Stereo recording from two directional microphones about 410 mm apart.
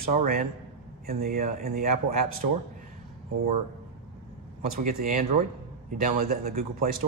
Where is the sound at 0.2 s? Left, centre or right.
Right.